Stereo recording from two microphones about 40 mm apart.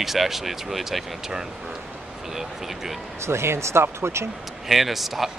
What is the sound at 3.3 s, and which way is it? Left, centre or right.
Speech, right.